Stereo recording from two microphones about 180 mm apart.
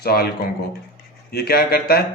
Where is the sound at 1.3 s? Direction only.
60° left (ahead or behind).